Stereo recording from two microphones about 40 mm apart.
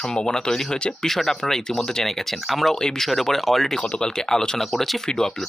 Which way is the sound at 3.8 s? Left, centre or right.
Centre.